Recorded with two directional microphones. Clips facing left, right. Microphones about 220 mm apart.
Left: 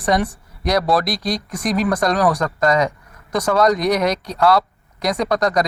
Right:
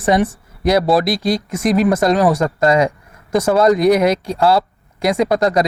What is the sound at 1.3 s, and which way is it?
Speech, 25° right (ahead or behind).